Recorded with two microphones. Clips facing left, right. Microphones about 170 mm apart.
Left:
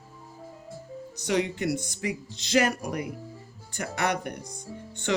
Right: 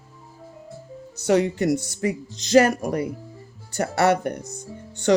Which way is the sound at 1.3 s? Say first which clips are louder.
Right 7 dB; 40° right (ahead or behind).